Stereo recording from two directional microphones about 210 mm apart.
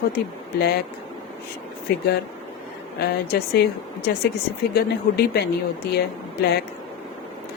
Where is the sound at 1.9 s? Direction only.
45° left (ahead or behind).